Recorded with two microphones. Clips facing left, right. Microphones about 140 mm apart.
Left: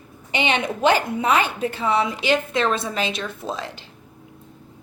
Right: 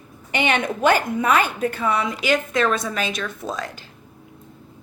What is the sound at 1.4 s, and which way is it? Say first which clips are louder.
Speech: right 1 dB; 50° right (ahead or behind).